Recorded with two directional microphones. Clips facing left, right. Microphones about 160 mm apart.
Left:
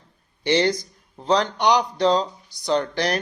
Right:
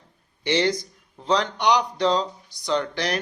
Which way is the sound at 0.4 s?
35° left (ahead or behind).